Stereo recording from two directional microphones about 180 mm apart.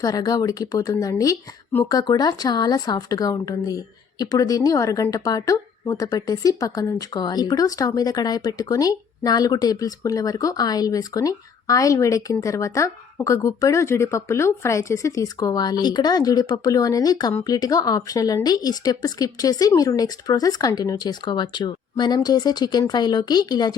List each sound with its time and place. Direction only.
0.0 s speech: 20° left (ahead or behind)